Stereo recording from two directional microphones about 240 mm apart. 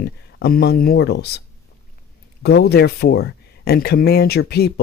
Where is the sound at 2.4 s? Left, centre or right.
Left.